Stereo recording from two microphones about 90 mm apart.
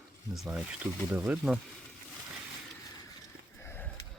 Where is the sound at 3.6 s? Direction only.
25° left (ahead or behind).